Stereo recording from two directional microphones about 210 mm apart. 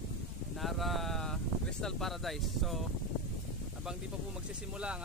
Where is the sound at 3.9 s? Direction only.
5° right (ahead or behind).